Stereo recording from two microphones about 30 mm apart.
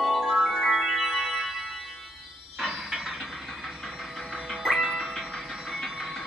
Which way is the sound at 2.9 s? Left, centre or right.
Centre.